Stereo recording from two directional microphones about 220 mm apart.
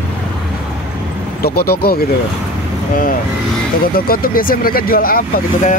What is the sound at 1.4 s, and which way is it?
Speech, 45° left (ahead or behind).